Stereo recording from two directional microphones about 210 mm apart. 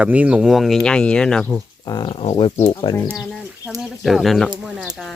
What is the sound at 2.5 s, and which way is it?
Speech, 20° left (ahead or behind).